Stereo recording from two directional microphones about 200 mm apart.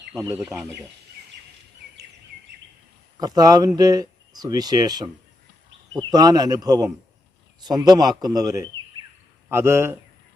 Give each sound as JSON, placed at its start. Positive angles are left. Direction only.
{"t": 0.1, "sound": "speech", "side_deg": -15}
{"t": 0.3, "sound": "speech", "side_deg": -5}
{"t": 3.2, "sound": "a man's voice", "side_deg": -20}